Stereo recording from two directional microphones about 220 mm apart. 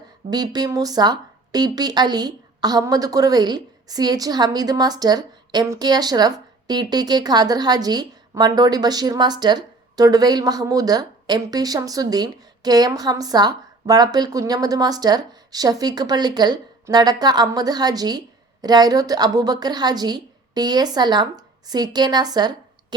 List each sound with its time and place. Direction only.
0.3 s a woman's voice: 20° right (ahead or behind)